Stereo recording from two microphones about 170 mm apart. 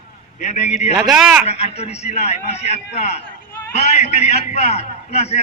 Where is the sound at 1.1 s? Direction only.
5° right (ahead or behind).